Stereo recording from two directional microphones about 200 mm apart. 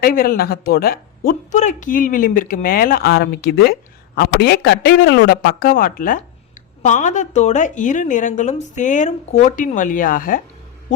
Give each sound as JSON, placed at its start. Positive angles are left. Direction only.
{"t": 0.0, "sound": "speech", "side_deg": 45}